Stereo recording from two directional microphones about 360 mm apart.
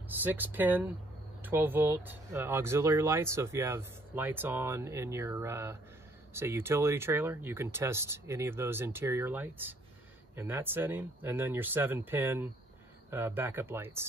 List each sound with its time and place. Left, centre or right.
0.2 s speech: centre